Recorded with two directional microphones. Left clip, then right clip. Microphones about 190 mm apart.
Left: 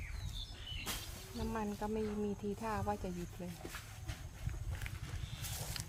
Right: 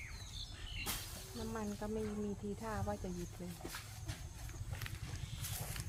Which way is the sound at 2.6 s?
65° left (ahead or behind).